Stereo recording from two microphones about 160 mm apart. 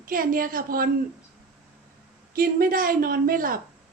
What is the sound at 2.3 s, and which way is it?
A woman's voice, 65° right (ahead or behind).